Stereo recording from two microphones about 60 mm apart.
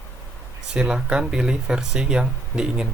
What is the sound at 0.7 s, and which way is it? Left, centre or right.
Speech, centre.